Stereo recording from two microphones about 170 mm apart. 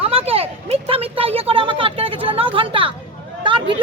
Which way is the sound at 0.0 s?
35° right (ahead or behind).